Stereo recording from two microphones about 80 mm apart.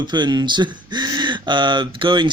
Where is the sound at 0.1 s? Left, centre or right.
Right.